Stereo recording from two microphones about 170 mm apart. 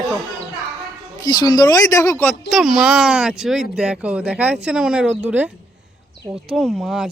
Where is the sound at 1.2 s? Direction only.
25° left (ahead or behind).